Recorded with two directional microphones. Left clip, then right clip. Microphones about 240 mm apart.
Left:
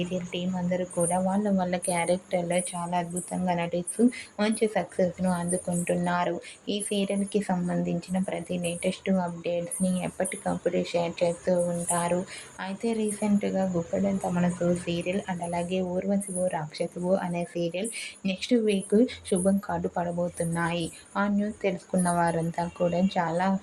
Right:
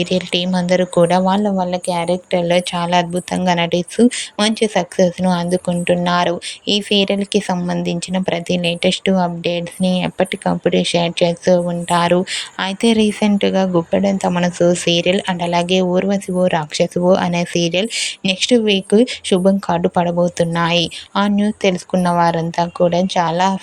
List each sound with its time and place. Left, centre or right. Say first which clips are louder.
0.0 s speech: right 14 dB; right